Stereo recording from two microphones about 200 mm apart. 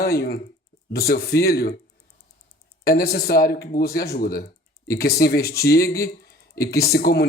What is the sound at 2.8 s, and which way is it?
Speech, 50° left (ahead or behind).